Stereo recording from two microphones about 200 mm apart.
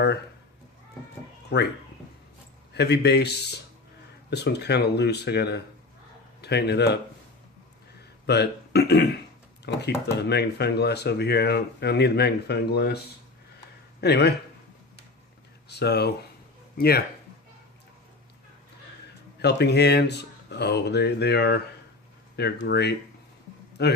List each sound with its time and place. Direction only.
2.7 s speech: 55° left (ahead or behind)
8.3 s speech: 55° left (ahead or behind)
14.0 s speech: 55° left (ahead or behind)
15.7 s speech: 55° left (ahead or behind)
19.4 s speech: 55° left (ahead or behind)